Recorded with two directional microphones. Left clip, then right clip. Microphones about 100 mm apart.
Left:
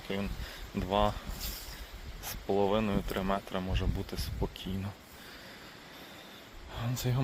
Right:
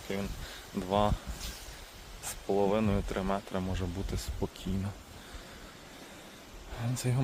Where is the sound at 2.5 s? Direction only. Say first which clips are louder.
Even; 10° right (ahead or behind).